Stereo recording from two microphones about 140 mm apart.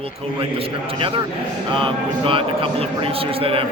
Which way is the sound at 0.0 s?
40° right (ahead or behind).